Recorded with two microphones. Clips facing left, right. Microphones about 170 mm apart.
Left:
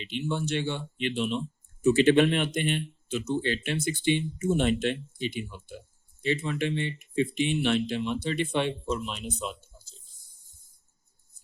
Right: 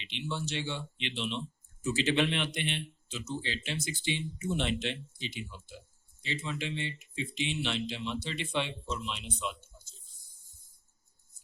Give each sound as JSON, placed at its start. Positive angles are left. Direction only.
{"t": 0.0, "sound": "speech", "side_deg": 45}
{"t": 1.8, "sound": "speech", "side_deg": 60}